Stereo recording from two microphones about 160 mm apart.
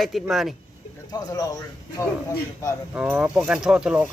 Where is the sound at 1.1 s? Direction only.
20° left (ahead or behind).